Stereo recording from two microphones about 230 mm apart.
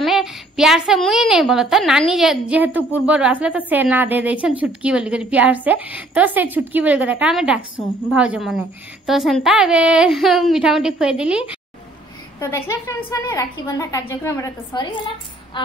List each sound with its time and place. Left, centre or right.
0.0 s a woman's voice: centre
12.4 s a woman's voice: centre
15.5 s music: left